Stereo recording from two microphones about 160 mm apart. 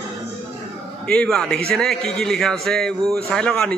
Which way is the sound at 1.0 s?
5° left (ahead or behind).